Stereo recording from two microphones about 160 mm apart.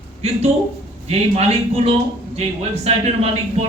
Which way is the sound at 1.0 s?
40° right (ahead or behind).